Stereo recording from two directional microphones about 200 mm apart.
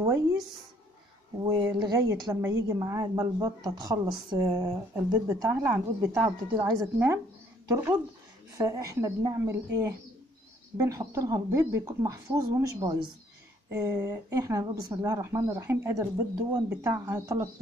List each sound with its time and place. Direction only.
0.0 s a woman's voice: 15° right (ahead or behind)
1.4 s a woman's voice: 20° right (ahead or behind)